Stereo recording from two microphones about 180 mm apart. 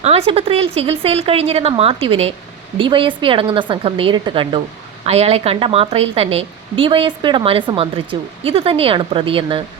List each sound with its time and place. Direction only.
0.0 s a woman's voice: 35° right (ahead or behind)